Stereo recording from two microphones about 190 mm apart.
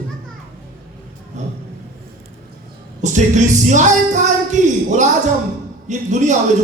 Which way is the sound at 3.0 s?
40° right (ahead or behind).